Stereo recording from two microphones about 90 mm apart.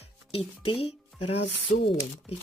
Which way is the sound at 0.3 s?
90° left.